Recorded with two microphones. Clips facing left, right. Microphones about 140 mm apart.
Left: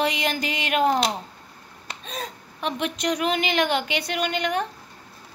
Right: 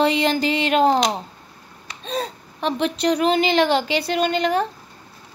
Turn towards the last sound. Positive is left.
turn(degrees=-35)  # may be behind; listen again after turning